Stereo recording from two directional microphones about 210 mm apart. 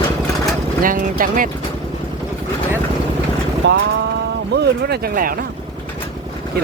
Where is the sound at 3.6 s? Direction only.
55° right (ahead or behind).